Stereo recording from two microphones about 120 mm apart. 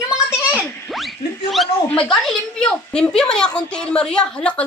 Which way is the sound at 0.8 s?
Centre (ahead or behind).